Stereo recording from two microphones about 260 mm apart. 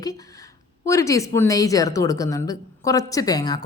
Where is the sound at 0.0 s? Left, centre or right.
Centre.